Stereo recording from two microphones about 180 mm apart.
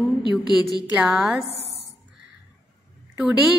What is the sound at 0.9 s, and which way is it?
Speech, centre (ahead or behind).